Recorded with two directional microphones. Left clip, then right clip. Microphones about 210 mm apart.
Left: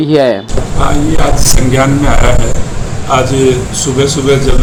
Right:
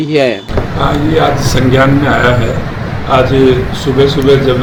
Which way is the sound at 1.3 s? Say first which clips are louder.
Right 1 dB; 10° left (ahead or behind).